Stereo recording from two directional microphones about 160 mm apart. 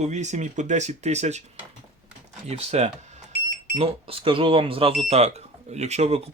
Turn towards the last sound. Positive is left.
turn(degrees=-40)  # may be behind; listen again after turning